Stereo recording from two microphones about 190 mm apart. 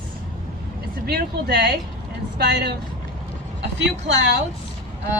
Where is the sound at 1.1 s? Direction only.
55° right (ahead or behind).